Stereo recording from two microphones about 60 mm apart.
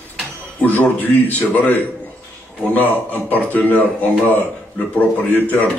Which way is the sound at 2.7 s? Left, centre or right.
Left.